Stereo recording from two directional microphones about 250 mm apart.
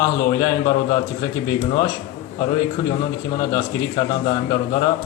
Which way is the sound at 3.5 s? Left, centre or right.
Centre.